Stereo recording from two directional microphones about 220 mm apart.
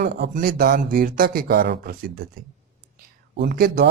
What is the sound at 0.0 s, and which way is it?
Speech, 45° right (ahead or behind).